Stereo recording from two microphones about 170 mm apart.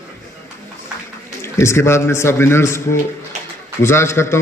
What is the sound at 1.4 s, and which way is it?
A man's voice, 15° left (ahead or behind).